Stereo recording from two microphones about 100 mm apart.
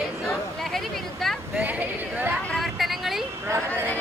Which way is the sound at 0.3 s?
Centre (ahead or behind).